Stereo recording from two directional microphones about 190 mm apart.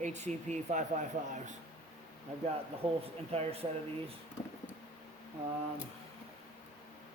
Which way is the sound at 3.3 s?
30° right (ahead or behind).